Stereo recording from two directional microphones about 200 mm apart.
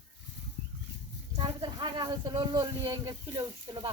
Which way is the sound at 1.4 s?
20° right (ahead or behind).